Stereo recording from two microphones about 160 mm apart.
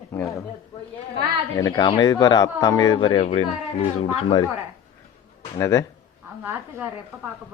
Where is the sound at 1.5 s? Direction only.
25° left (ahead or behind); by 4.3 s 40° left (ahead or behind).